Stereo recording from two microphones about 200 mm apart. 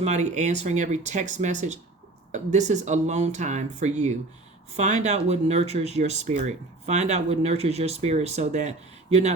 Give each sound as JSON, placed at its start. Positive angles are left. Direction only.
{"t": 0.0, "sound": "speech", "side_deg": -35}